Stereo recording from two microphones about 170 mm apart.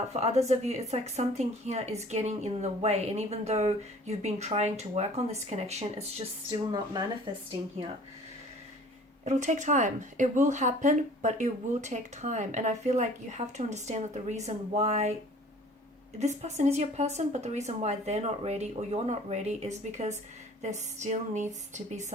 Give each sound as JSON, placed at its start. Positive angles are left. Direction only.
{"t": 0.1, "sound": "speech", "side_deg": -40}
{"t": 9.2, "sound": "speech", "side_deg": -45}
{"t": 16.1, "sound": "speech", "side_deg": -40}